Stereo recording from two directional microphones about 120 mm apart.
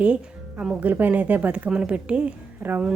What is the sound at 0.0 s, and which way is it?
A woman's voice, 10° right (ahead or behind).